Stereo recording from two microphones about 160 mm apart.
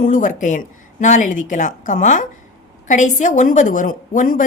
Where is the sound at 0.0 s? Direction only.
55° left (ahead or behind).